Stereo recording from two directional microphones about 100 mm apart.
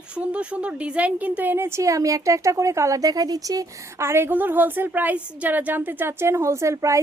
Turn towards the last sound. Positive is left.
turn(degrees=-30)  # may be behind; listen again after turning